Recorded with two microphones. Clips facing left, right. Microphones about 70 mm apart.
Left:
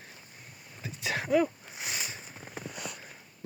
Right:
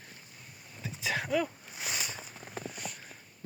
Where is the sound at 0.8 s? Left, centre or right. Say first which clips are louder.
Even; centre.